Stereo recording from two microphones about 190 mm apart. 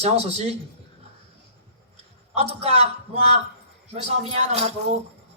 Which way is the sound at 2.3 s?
30° right (ahead or behind).